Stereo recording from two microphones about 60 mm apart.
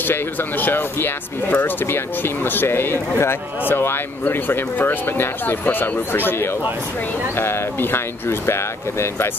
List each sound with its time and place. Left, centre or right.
0.0 s speech: left